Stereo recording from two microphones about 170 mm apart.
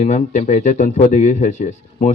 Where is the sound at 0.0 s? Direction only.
45° left (ahead or behind).